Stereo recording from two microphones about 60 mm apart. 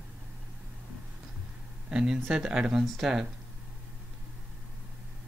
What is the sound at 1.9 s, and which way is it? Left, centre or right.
Speech, centre.